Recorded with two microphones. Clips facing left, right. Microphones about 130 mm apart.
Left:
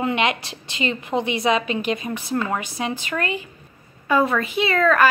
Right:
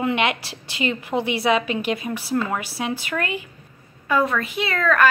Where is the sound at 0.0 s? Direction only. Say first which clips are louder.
Even; 10° right (ahead or behind).